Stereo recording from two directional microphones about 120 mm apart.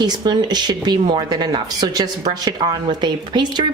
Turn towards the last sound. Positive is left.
turn(degrees=-40)  # may be behind; listen again after turning